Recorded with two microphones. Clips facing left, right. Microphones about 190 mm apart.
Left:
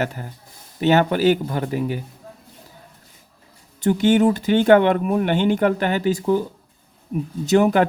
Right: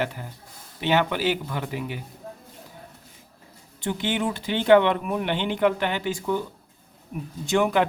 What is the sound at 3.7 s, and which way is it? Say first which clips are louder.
Speech: left 10 dB; 45° left (ahead or behind).